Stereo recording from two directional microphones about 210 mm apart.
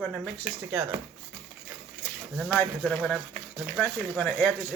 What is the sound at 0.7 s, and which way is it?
Speech, 10° right (ahead or behind).